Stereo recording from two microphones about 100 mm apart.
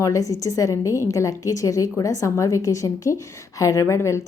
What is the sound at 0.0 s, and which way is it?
A woman's voice, 35° left (ahead or behind).